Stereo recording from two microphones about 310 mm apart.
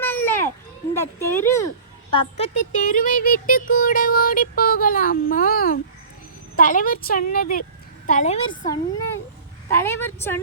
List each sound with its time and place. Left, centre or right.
0.0 s children playing: centre
0.9 s a woman's voice: centre
2.1 s a woman's voice: left